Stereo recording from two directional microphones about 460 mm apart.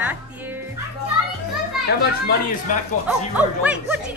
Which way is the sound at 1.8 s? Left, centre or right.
Centre.